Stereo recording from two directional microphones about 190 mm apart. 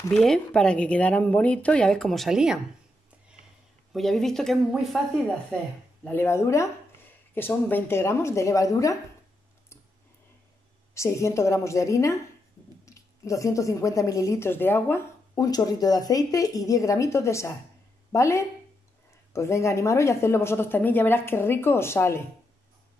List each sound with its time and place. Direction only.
0.1 s a woman's voice: 5° left (ahead or behind)
3.9 s a woman's voice: centre (ahead or behind)
6.0 s speech: 10° left (ahead or behind)
11.0 s speech: 15° left (ahead or behind)